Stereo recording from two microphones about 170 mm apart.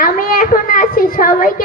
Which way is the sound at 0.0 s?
55° left (ahead or behind).